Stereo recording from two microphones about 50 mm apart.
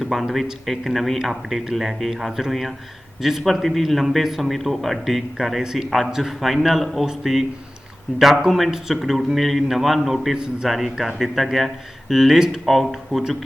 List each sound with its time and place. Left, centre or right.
0.0 s a man's voice: centre
10.3 s a man's voice: centre
10.7 s a man's voice: centre